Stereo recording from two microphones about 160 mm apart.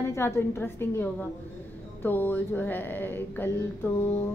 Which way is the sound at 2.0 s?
10° left (ahead or behind).